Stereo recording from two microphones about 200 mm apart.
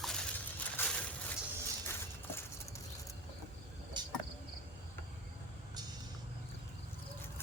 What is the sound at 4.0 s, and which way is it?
Cricket, 20° right (ahead or behind).